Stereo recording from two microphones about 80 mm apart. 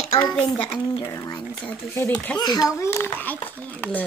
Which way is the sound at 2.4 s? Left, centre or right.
Left.